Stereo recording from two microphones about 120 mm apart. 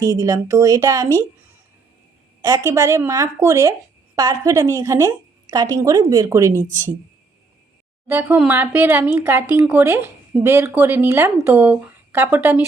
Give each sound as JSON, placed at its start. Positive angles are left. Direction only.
{"t": 0.0, "sound": "speech", "side_deg": -30}
{"t": 2.4, "sound": "speech", "side_deg": -30}
{"t": 8.0, "sound": "speech", "side_deg": -15}